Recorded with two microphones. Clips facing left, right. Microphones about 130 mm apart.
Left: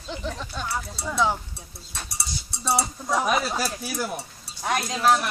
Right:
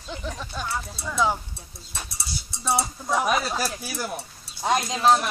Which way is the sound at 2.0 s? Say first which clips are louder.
Left 1 dB; 65° left (ahead or behind).